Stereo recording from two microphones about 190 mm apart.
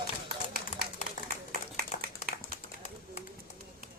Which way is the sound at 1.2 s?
45° left (ahead or behind).